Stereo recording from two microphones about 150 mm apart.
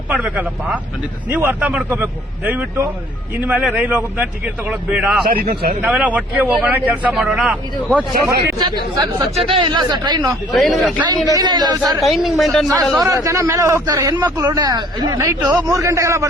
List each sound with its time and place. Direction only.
0.1 s a man's voice: 10° right (ahead or behind)
5.2 s a man's voice: 85° right
5.8 s a man's voice: 10° right (ahead or behind)
8.1 s a man's voice: 90° right
8.5 s a man's voice: 30° right (ahead or behind)
10.5 s speech: centre (ahead or behind)
11.3 s a man's voice: 30° right (ahead or behind)
11.9 s speech: centre (ahead or behind)
13.0 s a man's voice: 25° right (ahead or behind)